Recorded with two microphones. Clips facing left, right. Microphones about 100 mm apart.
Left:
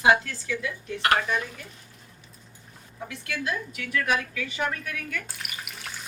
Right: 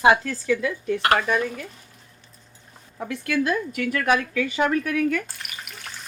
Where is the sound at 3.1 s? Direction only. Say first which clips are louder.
Right 8 dB; 55° right (ahead or behind).